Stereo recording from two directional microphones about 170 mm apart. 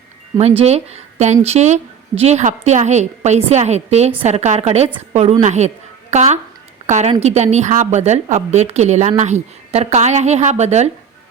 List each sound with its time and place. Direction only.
0.3 s a woman's voice: 35° right (ahead or behind)